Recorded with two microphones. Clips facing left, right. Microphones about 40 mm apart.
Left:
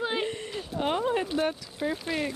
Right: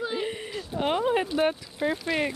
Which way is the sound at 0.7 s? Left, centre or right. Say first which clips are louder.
Right 2 dB; centre.